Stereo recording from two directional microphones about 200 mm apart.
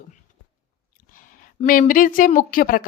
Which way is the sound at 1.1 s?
40° left (ahead or behind).